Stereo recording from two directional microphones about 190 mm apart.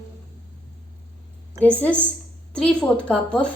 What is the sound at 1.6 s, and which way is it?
A woman's voice, 5° left (ahead or behind).